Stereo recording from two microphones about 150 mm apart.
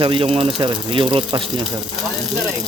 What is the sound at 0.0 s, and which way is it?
Speech, 35° right (ahead or behind).